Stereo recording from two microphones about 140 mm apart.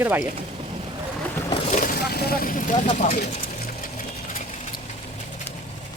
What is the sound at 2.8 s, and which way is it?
Sewing machine, 60° left (ahead or behind).